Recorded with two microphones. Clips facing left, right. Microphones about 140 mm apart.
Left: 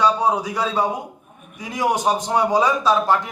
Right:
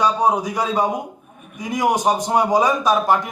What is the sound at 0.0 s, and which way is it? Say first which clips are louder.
A man's voice: right 1 dB; 15° right (ahead or behind).